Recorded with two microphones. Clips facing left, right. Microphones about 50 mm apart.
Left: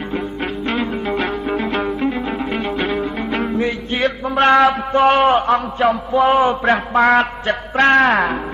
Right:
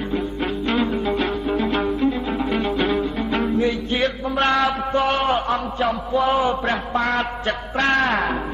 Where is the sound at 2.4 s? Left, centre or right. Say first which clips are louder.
Even; left.